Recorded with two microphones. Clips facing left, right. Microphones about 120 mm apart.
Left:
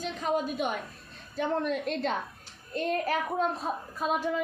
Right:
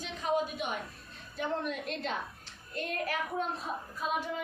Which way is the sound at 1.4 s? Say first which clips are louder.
Left 5 dB; 40° left (ahead or behind).